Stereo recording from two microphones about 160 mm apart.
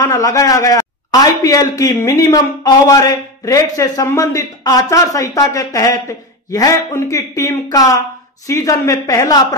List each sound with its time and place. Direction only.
0.0 s a man's voice: 20° left (ahead or behind)